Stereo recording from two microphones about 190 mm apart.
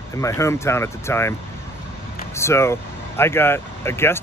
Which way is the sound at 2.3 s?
15° left (ahead or behind).